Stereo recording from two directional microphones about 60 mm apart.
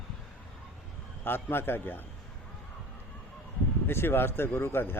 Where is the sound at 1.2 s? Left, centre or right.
Left.